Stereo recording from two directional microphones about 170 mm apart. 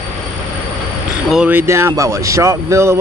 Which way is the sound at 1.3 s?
10° right (ahead or behind).